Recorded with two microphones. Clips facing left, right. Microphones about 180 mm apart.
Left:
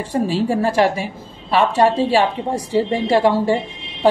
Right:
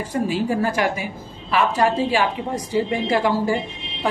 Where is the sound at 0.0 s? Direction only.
30° left (ahead or behind).